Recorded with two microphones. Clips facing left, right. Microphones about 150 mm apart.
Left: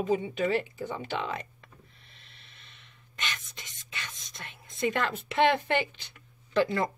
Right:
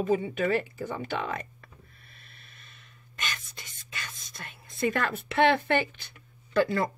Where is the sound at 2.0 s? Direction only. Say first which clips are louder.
Right 2 dB; 45° right (ahead or behind).